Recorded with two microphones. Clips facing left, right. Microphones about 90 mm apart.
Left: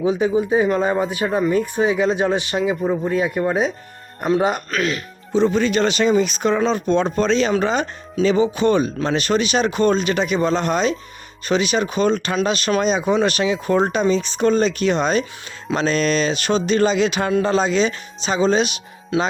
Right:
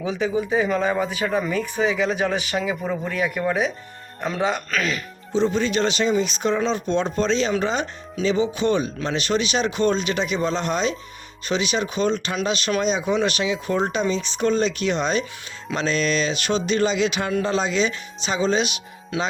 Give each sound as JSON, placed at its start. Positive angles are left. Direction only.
{"t": 0.0, "sound": "speech", "side_deg": 30}
{"t": 1.2, "sound": "speech", "side_deg": 10}
{"t": 2.2, "sound": "speech", "side_deg": 15}
{"t": 5.3, "sound": "speech", "side_deg": 55}